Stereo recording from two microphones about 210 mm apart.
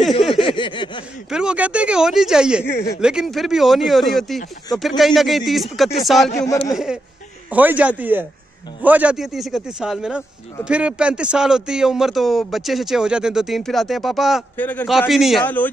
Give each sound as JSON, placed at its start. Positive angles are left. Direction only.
{"t": 0.4, "sound": "a sound", "side_deg": 25}
{"t": 1.3, "sound": "a man's voice", "side_deg": -5}
{"t": 2.6, "sound": "speech", "side_deg": 10}
{"t": 3.0, "sound": "a man's voice", "side_deg": -5}
{"t": 6.4, "sound": "speech", "side_deg": 15}
{"t": 6.7, "sound": "a man's voice", "side_deg": 0}